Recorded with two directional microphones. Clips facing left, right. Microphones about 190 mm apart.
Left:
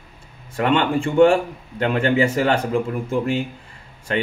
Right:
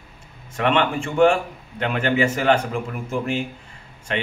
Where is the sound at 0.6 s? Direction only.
30° left (ahead or behind).